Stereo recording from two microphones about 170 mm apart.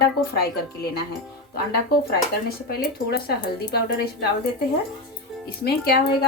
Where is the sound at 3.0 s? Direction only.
65° left (ahead or behind).